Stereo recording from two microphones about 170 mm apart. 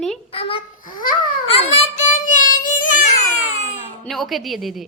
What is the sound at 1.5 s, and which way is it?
Child singing, 40° left (ahead or behind).